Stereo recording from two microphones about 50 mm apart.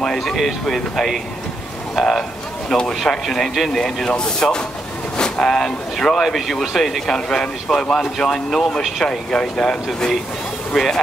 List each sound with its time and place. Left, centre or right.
0.0 s speech: centre